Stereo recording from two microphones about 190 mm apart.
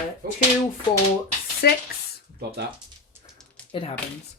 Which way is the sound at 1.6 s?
60° left (ahead or behind).